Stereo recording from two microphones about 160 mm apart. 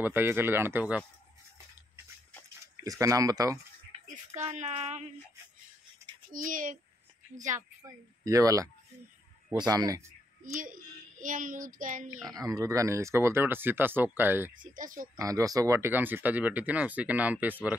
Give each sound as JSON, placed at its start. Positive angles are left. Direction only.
{"t": 0.0, "sound": "speech", "side_deg": -15}
{"t": 2.8, "sound": "speech", "side_deg": -20}
{"t": 4.4, "sound": "speech", "side_deg": -45}
{"t": 6.3, "sound": "a child's voice", "side_deg": -55}
{"t": 7.8, "sound": "speech", "side_deg": -20}
{"t": 9.7, "sound": "speech", "side_deg": -25}
{"t": 10.6, "sound": "speech", "side_deg": -55}
{"t": 12.4, "sound": "speech", "side_deg": -20}
{"t": 14.6, "sound": "a child's voice", "side_deg": -55}
{"t": 15.1, "sound": "speech", "side_deg": -20}